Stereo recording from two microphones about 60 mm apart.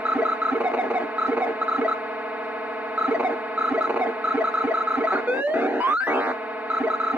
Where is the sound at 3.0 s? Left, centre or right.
Right.